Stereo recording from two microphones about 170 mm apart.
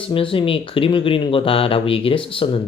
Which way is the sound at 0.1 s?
30° left (ahead or behind).